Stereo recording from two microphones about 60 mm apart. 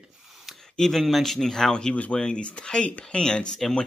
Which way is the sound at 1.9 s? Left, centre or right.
Centre.